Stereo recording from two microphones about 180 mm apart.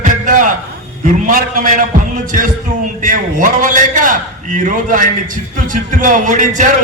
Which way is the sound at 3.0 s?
45° right (ahead or behind).